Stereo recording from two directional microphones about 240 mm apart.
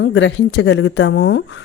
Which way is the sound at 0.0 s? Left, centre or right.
Left.